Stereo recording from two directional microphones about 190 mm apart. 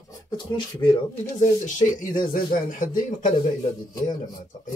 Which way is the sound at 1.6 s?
45° left (ahead or behind).